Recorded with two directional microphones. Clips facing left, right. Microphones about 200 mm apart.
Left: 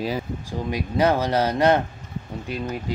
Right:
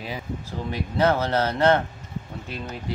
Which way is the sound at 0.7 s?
15° left (ahead or behind).